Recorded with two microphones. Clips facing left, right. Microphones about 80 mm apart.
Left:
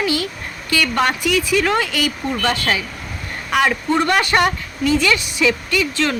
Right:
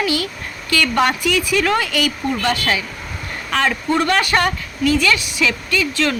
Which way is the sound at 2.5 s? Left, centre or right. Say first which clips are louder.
Even; left.